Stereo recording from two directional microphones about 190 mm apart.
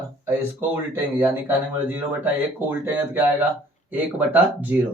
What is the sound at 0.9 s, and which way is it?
Speech, 10° right (ahead or behind).